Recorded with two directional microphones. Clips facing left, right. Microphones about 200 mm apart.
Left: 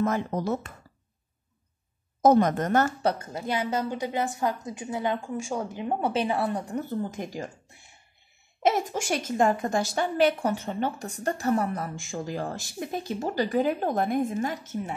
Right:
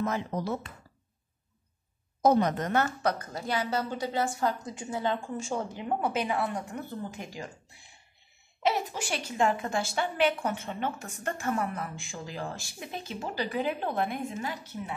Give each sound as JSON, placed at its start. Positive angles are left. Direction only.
{"t": 0.0, "sound": "speech", "side_deg": 50}
{"t": 2.2, "sound": "speech", "side_deg": 50}
{"t": 3.0, "sound": "a woman's voice", "side_deg": 30}
{"t": 5.9, "sound": "a woman's voice", "side_deg": 30}
{"t": 8.6, "sound": "a woman's voice", "side_deg": 45}